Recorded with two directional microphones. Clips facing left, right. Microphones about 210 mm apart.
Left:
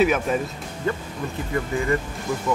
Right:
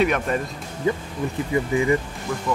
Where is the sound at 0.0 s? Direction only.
5° left (ahead or behind).